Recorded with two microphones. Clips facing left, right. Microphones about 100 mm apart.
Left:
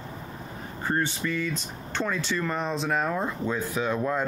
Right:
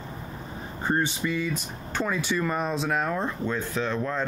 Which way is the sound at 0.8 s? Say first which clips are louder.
Right 1 dB; 15° right (ahead or behind).